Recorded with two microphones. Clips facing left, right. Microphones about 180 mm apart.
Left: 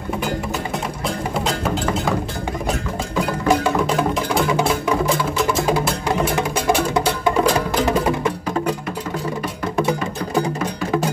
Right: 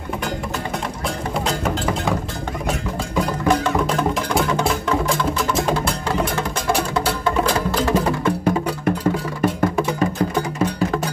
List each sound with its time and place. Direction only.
3.4 s music: 10° left (ahead or behind)
5.8 s music: 15° left (ahead or behind)